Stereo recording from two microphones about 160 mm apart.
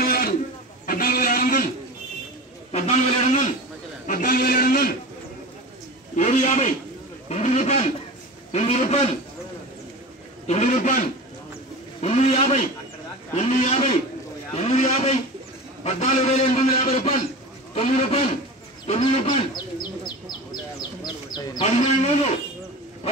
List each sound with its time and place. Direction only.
0.0 s a sound: 70° left (ahead or behind)
2.7 s a man's voice: 45° left (ahead or behind)
4.1 s a man's voice: 60° left (ahead or behind)
6.1 s a man's voice: 45° left (ahead or behind)
10.4 s a man's voice: 45° left (ahead or behind)
13.4 s a man's voice: 50° left (ahead or behind)
20.5 s bird: 25° left (ahead or behind)
21.6 s a man's voice: 45° left (ahead or behind)